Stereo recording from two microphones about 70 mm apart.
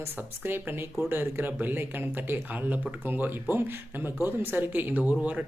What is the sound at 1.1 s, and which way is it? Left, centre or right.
Speech, right.